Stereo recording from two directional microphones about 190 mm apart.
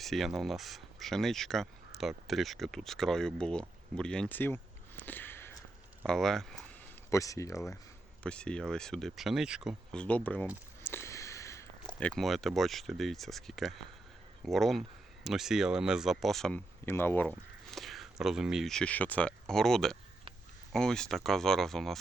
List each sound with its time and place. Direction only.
0.0 s speech: centre (ahead or behind)
7.1 s speech: 15° left (ahead or behind)
8.2 s speech: 5° left (ahead or behind)